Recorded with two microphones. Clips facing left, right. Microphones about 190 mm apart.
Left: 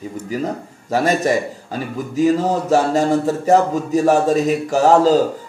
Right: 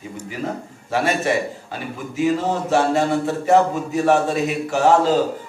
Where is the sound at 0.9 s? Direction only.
40° left (ahead or behind).